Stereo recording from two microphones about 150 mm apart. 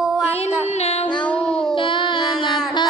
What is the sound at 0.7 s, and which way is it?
Music, 45° left (ahead or behind).